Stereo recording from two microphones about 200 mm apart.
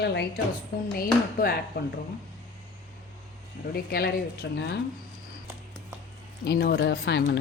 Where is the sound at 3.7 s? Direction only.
50° left (ahead or behind).